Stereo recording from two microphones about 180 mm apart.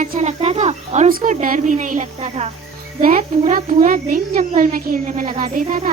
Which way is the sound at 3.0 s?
50° right (ahead or behind).